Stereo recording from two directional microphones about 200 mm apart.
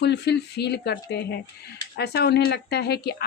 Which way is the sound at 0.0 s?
55° left (ahead or behind).